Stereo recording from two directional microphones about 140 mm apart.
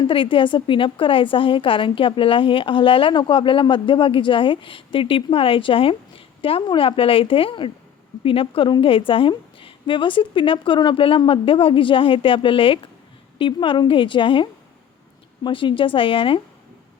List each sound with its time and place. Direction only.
0.0 s a woman's voice: 35° left (ahead or behind)